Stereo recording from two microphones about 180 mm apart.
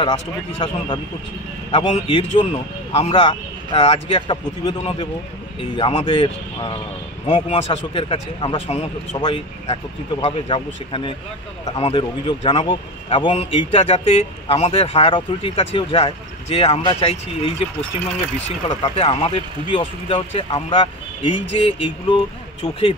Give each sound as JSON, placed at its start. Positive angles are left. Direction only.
{"t": 0.0, "sound": "a man's voice", "side_deg": 30}